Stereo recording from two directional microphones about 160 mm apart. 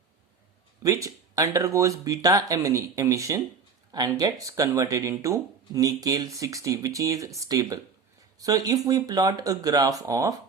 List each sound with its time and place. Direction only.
0.8 s speech: 20° right (ahead or behind)